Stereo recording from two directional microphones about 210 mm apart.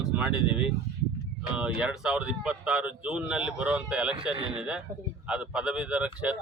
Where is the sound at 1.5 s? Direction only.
5° right (ahead or behind).